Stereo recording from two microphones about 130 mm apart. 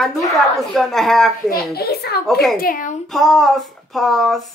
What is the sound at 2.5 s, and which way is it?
Speech, 90° left.